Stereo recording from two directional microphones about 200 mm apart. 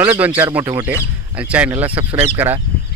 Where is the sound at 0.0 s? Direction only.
10° right (ahead or behind).